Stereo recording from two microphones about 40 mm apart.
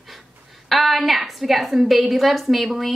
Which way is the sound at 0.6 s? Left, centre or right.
Centre.